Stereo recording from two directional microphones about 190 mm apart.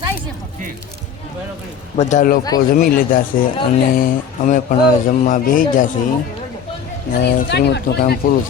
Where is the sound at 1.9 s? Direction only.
40° left (ahead or behind).